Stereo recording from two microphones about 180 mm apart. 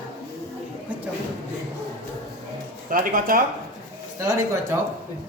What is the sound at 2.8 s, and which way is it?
Speech, 50° right (ahead or behind).